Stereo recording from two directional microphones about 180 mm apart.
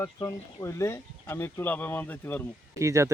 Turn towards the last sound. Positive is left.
turn(degrees=-15)  # may be behind; listen again after turning